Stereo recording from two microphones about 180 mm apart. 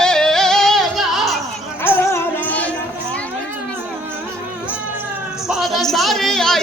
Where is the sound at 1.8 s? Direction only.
15° left (ahead or behind).